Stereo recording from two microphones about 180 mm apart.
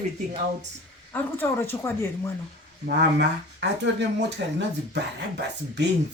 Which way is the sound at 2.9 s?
70° right (ahead or behind).